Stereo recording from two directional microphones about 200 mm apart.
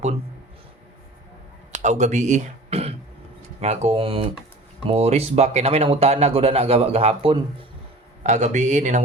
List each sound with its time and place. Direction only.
1.8 s a man's voice: 35° right (ahead or behind)